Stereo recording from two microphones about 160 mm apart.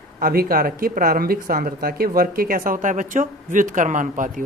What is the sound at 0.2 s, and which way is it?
Speech, 65° right (ahead or behind).